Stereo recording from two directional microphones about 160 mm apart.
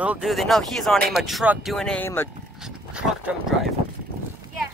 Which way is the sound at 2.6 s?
5° right (ahead or behind).